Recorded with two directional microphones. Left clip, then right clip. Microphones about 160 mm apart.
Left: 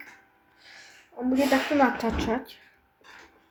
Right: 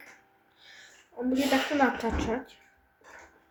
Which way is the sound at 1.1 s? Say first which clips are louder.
Left 3 dB; 15° left (ahead or behind).